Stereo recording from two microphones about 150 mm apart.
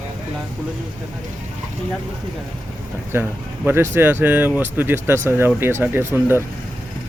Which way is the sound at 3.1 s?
15° right (ahead or behind).